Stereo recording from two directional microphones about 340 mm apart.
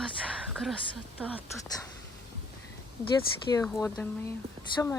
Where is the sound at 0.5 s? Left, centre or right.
Centre.